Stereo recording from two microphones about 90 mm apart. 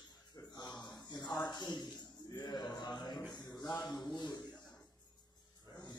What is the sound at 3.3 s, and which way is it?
Music, 50° left (ahead or behind).